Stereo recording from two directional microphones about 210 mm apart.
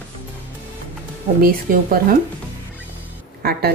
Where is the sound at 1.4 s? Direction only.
45° right (ahead or behind).